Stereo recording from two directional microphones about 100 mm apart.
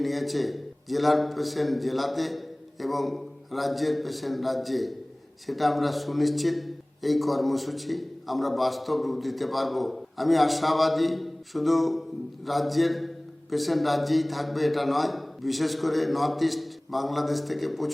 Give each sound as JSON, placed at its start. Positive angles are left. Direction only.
{"t": 0.0, "sound": "a man's voice", "side_deg": 0}